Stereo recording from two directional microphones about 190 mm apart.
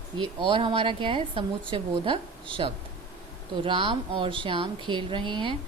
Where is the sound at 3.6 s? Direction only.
25° right (ahead or behind).